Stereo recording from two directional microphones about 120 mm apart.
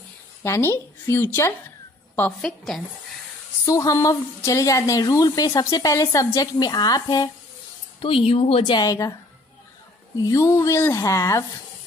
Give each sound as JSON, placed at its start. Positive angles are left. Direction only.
{"t": 0.4, "sound": "a woman's voice", "side_deg": 20}
{"t": 2.4, "sound": "speech", "side_deg": 5}
{"t": 3.6, "sound": "a woman's voice", "side_deg": 30}
{"t": 8.3, "sound": "speech", "side_deg": 55}
{"t": 8.7, "sound": "a woman's voice", "side_deg": 30}
{"t": 10.1, "sound": "a woman's voice", "side_deg": 30}